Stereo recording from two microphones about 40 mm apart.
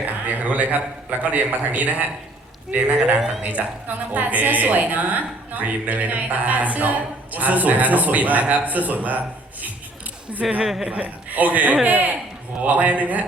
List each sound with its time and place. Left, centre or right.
0.0 s a sound: right
1.2 s a woman's voice: right
10.6 s a woman's voice: centre
10.8 s a man's voice: right
11.3 s a woman's voice: right